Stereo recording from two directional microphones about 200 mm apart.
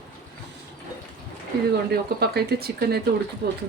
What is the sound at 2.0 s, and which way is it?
Speech, 55° right (ahead or behind).